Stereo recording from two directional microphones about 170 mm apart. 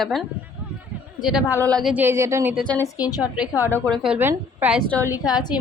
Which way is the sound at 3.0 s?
20° left (ahead or behind).